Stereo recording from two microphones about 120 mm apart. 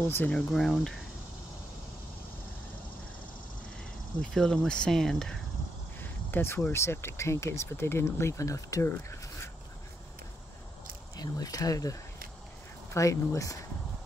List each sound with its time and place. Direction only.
0.0 s speech: 20° left (ahead or behind)
0.3 s speech: 5° left (ahead or behind)
4.2 s speech: 5° left (ahead or behind)
5.9 s speech: 20° left (ahead or behind)
11.1 s speech: 30° left (ahead or behind)